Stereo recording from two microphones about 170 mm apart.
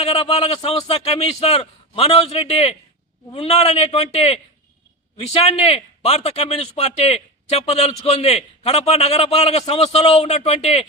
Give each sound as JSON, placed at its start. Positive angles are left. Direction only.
{"t": 0.0, "sound": "speech", "side_deg": 35}